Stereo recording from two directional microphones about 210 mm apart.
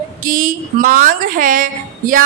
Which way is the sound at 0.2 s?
40° right (ahead or behind).